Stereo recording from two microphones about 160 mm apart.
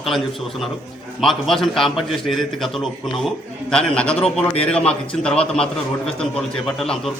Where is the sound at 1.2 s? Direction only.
Centre (ahead or behind).